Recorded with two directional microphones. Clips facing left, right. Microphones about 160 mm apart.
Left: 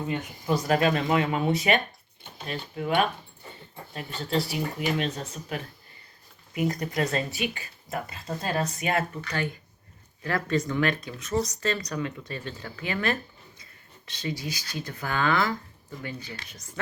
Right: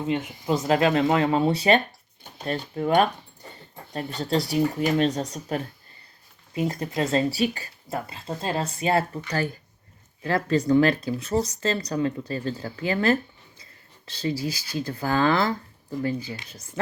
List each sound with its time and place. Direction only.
0.0 s speech: 20° right (ahead or behind); by 5.6 s 40° right (ahead or behind)
6.5 s speech: 25° right (ahead or behind)
10.2 s speech: 30° right (ahead or behind)
13.6 s a sound: 30° right (ahead or behind)
14.7 s speech: 30° right (ahead or behind)